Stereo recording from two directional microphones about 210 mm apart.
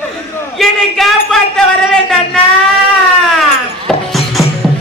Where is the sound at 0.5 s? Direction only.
Centre (ahead or behind).